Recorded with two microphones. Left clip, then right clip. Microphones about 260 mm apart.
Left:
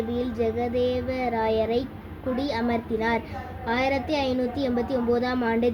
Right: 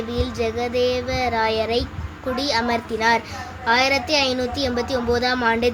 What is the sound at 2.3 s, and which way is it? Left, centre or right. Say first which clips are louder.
A woman's voice: right 5 dB; centre.